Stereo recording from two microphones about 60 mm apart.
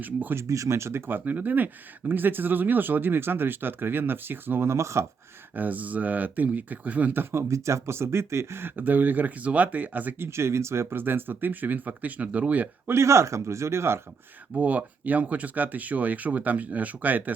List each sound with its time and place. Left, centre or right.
0.0 s speech: right
0.3 s speech: right
4.7 s speech: right
5.5 s speech: right
7.3 s speech: right
10.2 s speech: right
12.9 s speech: right
14.5 s speech: right